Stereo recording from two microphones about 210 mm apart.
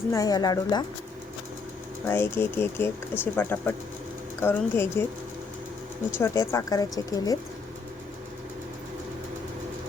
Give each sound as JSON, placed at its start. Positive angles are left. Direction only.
{"t": 0.1, "sound": "speech", "side_deg": 15}
{"t": 2.0, "sound": "speech", "side_deg": 10}
{"t": 6.1, "sound": "speech", "side_deg": 10}